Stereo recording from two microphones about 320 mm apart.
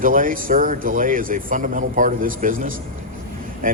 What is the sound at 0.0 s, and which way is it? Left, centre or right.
Speech, right.